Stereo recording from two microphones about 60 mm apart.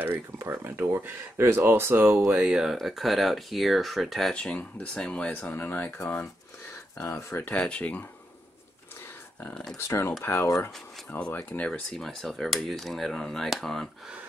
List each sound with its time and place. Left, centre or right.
0.5 s speech: right
2.3 s speech: centre
2.6 s speech: centre
4.3 s speech: left
5.4 s speech: left
7.0 s speech: left
7.4 s speech: centre
9.8 s speech: left
11.1 s speech: left
11.9 s speech: centre